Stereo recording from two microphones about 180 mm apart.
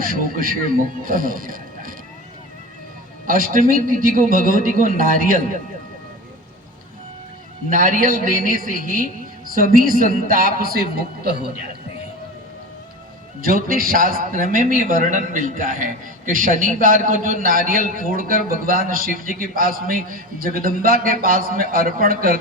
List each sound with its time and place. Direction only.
0.0 s a man's voice: 50° right (ahead or behind)
3.2 s a man's voice: 50° right (ahead or behind)
7.7 s a man's voice: 50° right (ahead or behind)
13.4 s a man's voice: 50° right (ahead or behind)